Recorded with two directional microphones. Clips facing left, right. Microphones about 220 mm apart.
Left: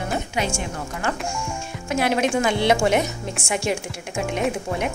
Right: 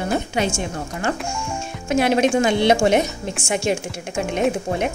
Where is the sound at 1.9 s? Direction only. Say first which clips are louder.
Right 4 dB; 20° right (ahead or behind).